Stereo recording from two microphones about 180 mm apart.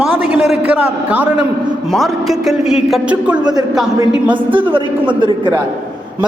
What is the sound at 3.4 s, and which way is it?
A man's voice, 20° right (ahead or behind).